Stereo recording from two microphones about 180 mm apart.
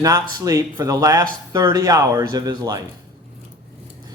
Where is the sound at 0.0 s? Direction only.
20° right (ahead or behind).